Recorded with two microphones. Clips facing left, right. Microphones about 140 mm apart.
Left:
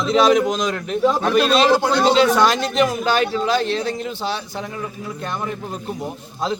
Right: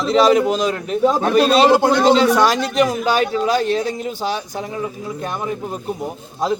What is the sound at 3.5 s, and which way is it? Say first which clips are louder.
Speech: right 3 dB; 45° right (ahead or behind).